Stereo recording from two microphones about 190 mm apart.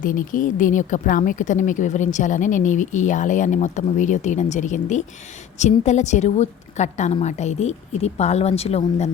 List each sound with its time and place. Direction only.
0.0 s speech: 45° left (ahead or behind)